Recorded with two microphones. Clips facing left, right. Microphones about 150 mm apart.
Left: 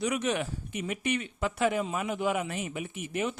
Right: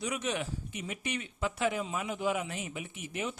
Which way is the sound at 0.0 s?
60° left (ahead or behind).